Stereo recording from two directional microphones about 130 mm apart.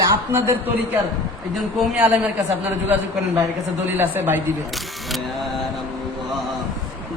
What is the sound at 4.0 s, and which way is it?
Speech, 15° right (ahead or behind).